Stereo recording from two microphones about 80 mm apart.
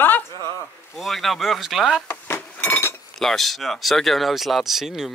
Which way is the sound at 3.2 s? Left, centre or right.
Centre.